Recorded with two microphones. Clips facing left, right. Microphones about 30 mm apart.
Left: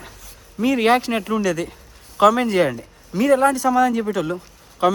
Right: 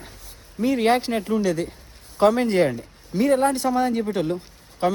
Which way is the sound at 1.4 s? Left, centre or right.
Left.